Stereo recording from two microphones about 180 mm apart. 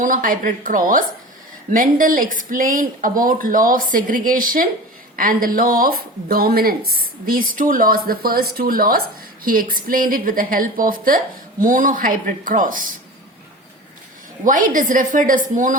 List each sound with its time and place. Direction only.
0.0 s speech: 50° right (ahead or behind)
14.4 s speech: 50° right (ahead or behind)